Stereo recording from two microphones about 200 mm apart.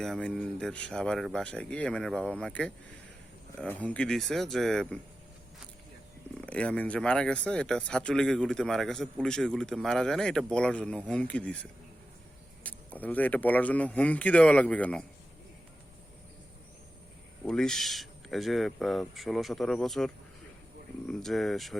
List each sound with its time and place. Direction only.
0.0 s speech: 5° left (ahead or behind)
6.3 s speech: 5° left (ahead or behind)
17.4 s speech: 5° left (ahead or behind)
21.1 s speech: centre (ahead or behind)